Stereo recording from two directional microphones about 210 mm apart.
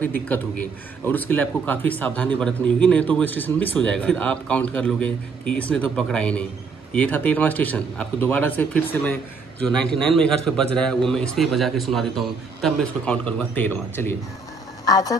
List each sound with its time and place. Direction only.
0.3 s a man's voice: 10° left (ahead or behind)